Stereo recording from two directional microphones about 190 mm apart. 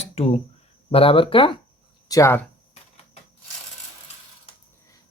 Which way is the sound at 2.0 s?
15° left (ahead or behind).